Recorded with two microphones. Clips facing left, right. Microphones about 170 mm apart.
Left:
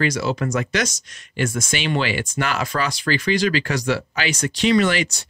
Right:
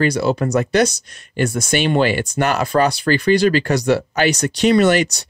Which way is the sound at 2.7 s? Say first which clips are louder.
Right 10 dB; 35° right (ahead or behind).